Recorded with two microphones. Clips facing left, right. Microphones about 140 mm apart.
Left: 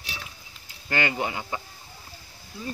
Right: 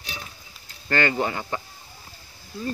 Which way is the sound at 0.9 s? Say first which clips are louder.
Right 4 dB; 15° left (ahead or behind).